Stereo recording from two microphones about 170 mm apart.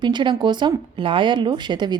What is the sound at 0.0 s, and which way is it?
Speech, 25° right (ahead or behind).